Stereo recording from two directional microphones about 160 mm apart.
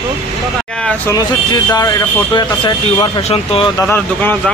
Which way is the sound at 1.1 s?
25° left (ahead or behind).